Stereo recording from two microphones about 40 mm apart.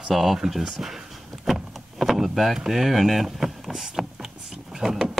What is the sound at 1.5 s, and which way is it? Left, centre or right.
Power windows, centre.